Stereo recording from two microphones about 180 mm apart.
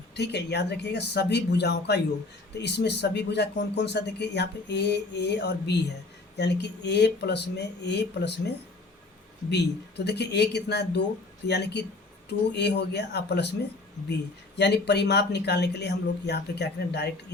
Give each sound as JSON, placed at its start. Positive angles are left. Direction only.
{"t": 0.2, "sound": "speech", "side_deg": 70}